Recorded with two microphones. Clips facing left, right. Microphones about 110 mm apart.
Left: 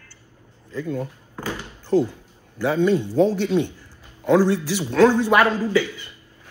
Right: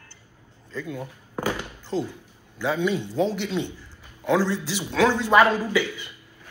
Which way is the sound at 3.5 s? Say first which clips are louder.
Left 6 dB; 15° left (ahead or behind).